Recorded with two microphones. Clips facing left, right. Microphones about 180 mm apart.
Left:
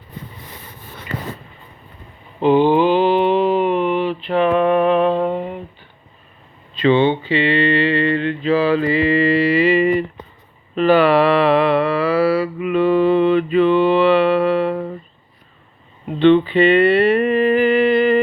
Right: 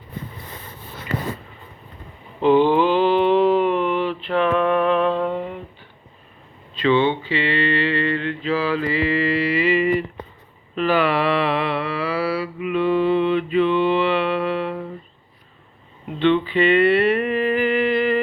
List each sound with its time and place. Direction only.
2.4 s mantra: 10° left (ahead or behind)
4.5 s humming: 10° left (ahead or behind)
6.8 s mantra: 20° left (ahead or behind); by 14.9 s 50° left (ahead or behind)
16.1 s speech: 30° left (ahead or behind)
16.5 s a sound: 25° left (ahead or behind)